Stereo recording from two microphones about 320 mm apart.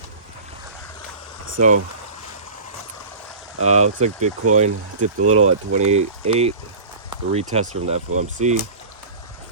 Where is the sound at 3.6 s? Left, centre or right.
Right.